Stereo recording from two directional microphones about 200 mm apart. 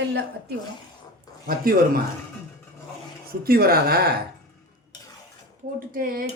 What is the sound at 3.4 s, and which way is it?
Speech, 50° right (ahead or behind).